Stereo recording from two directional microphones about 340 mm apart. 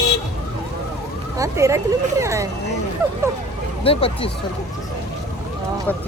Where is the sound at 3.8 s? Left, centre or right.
Centre.